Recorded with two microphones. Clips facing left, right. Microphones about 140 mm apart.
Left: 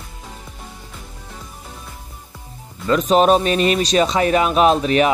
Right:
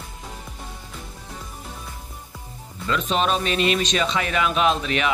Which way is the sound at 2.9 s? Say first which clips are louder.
Left 9 dB; 40° left (ahead or behind).